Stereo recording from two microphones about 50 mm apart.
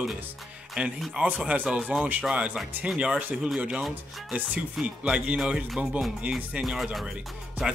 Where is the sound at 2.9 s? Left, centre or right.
Centre.